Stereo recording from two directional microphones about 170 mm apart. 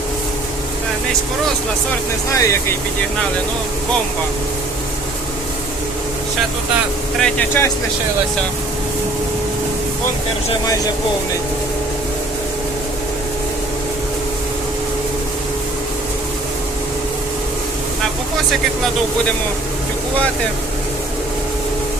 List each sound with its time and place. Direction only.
2.3 s speech: 20° left (ahead or behind)
7.2 s speech: 10° left (ahead or behind)